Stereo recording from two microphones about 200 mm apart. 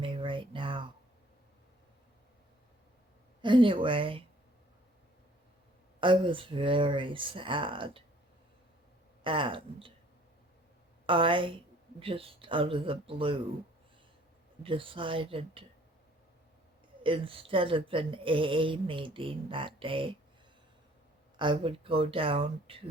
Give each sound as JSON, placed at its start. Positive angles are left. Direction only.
{"t": 0.0, "sound": "a sound", "side_deg": -25}
{"t": 3.4, "sound": "speech", "side_deg": -25}
{"t": 6.0, "sound": "speech", "side_deg": -25}
{"t": 9.2, "sound": "speech", "side_deg": -25}
{"t": 11.0, "sound": "speech", "side_deg": -25}
{"t": 14.6, "sound": "speech", "side_deg": -25}
{"t": 17.0, "sound": "speech", "side_deg": -25}
{"t": 21.3, "sound": "speech", "side_deg": -25}